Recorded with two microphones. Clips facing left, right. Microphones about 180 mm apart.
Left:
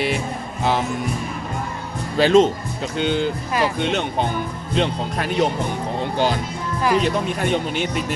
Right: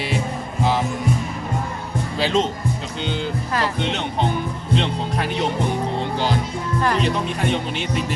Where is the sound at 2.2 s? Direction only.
50° left (ahead or behind).